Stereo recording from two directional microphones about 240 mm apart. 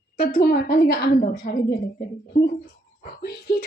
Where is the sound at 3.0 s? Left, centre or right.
Left.